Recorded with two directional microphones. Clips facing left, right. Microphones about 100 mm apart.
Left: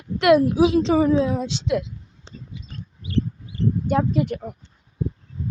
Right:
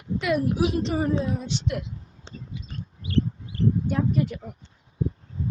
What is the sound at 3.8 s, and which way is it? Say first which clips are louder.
Speech: left 4 dB; 85° left.